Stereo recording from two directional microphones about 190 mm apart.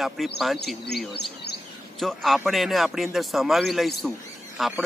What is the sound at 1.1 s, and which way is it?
Speech, 60° left (ahead or behind).